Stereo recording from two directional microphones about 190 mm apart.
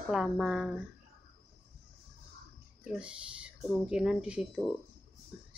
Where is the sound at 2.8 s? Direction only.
5° right (ahead or behind).